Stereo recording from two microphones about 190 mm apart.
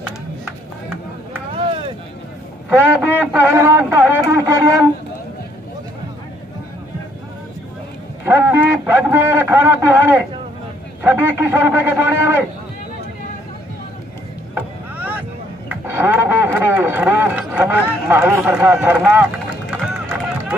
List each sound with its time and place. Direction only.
0.5 s chop: 5° right (ahead or behind)
1.5 s boat: 30° right (ahead or behind)
2.7 s speech: 10° right (ahead or behind)
8.3 s a sound: 10° right (ahead or behind)
14.5 s chop: 10° right (ahead or behind)
15.7 s a sound: 10° right (ahead or behind)
19.7 s run: 5° right (ahead or behind)